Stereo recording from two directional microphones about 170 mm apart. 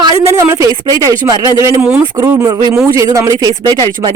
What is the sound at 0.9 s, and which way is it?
Speech, 20° right (ahead or behind).